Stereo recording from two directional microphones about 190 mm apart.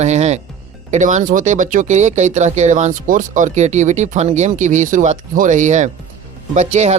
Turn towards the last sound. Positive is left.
turn(degrees=-35)  # may be behind; listen again after turning